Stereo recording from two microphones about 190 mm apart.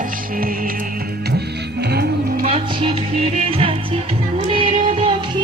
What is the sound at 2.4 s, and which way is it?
Music, 35° right (ahead or behind).